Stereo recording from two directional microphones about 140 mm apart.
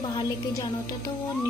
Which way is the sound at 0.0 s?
25° left (ahead or behind).